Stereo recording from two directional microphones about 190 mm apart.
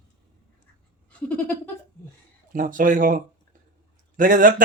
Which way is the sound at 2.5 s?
45° right (ahead or behind).